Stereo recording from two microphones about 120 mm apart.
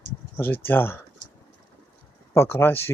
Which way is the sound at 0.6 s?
20° left (ahead or behind).